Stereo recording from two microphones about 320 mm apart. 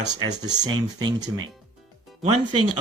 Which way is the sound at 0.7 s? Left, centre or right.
Right.